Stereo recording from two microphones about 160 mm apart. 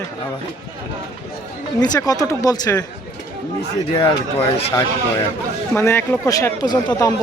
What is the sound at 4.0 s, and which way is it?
Speech, 30° left (ahead or behind).